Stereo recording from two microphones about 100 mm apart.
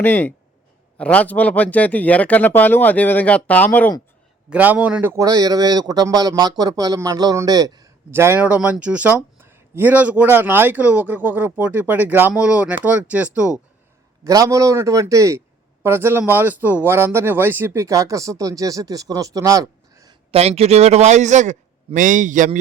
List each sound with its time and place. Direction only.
0.0 s speech: 15° left (ahead or behind)
4.4 s speech: 15° right (ahead or behind)
5.1 s speech: 40° right (ahead or behind)
8.1 s speech: 25° right (ahead or behind)
8.4 s speech: 15° right (ahead or behind)
14.3 s speech: 35° right (ahead or behind)
20.3 s speech: 90° right